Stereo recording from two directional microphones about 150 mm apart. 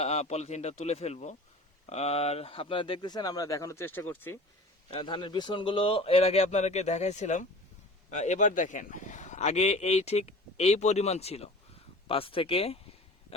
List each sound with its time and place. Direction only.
0.0 s a man's voice: 45° left (ahead or behind); by 4.4 s 15° left (ahead or behind)
4.9 s a man's voice: 35° left (ahead or behind)